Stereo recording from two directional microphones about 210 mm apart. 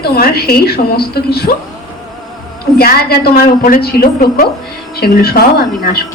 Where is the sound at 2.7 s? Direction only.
50° left (ahead or behind).